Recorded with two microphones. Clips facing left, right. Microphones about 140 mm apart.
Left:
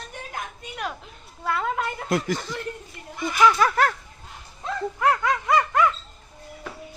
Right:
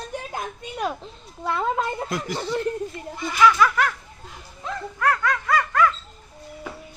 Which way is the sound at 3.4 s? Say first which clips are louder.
Right 1 dB; 35° left (ahead or behind).